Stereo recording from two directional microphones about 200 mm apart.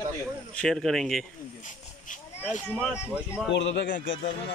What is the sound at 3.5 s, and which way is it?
Speech, 60° left (ahead or behind).